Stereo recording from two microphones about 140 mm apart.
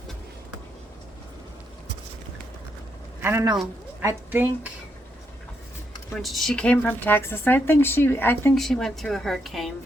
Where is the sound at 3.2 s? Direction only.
15° right (ahead or behind).